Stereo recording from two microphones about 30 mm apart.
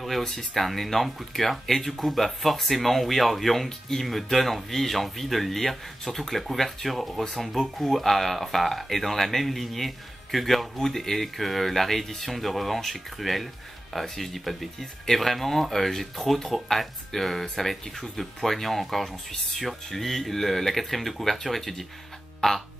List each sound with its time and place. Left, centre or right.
0.2 s speech: centre